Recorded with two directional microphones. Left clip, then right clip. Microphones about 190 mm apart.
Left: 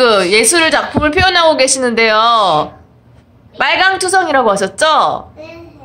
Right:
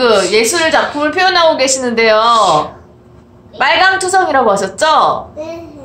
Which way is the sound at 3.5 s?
30° left (ahead or behind).